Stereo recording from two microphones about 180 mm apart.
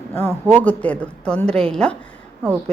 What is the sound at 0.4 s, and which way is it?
A woman's voice, 10° left (ahead or behind).